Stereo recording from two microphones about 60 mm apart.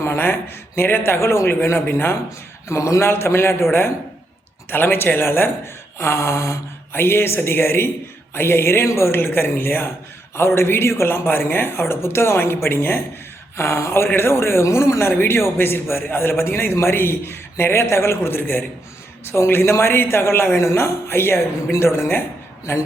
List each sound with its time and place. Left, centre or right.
0.0 s speech: left
2.6 s a woman's voice: left
6.9 s a woman's voice: left
15.1 s a woman's voice: left